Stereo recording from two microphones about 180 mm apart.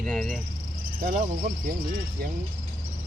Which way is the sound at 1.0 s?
50° right (ahead or behind).